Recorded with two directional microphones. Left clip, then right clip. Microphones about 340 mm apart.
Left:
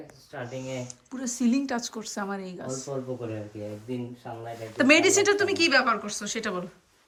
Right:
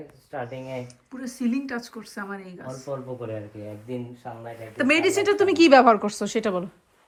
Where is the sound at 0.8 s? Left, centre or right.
Centre.